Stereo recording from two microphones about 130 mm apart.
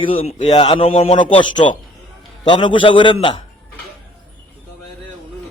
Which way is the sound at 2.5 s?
40° left (ahead or behind).